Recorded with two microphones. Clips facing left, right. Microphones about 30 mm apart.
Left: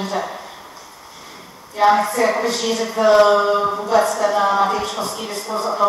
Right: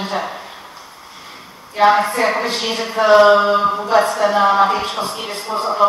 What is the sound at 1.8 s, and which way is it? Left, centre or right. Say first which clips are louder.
Speech: right 2 dB; right.